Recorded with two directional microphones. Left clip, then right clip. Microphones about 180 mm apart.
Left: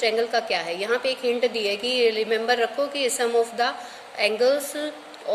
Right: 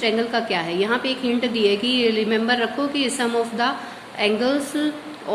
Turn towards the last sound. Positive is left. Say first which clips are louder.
# even
turn(degrees=30)  # may be behind; listen again after turning